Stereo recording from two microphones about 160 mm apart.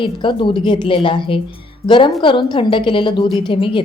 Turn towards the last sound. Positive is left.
turn(degrees=30)  # may be behind; listen again after turning